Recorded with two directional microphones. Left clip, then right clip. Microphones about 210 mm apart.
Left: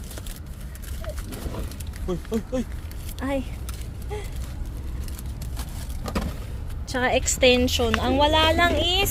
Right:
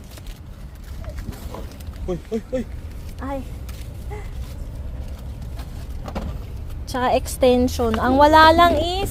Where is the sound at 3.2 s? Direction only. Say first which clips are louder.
Left 1 dB; 20° left (ahead or behind).